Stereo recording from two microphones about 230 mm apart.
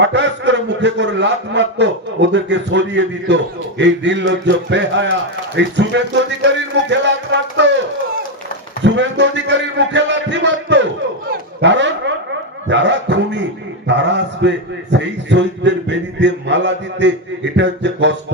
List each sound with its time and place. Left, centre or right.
0.0 s a man's voice: right
8.8 s a sound: right
12.6 s a man's voice: right